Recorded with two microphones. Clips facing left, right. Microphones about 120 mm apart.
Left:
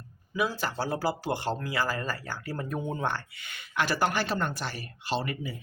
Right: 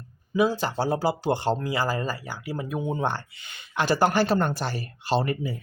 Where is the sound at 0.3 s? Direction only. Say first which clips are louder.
Right 6 dB; 25° right (ahead or behind).